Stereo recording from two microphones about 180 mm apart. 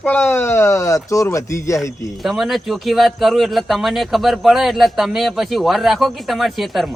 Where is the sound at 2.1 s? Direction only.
Centre (ahead or behind).